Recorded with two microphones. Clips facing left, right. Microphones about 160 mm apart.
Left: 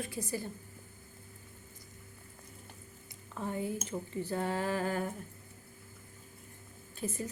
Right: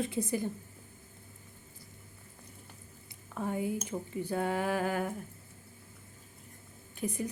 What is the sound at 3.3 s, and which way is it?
Speech, 15° right (ahead or behind).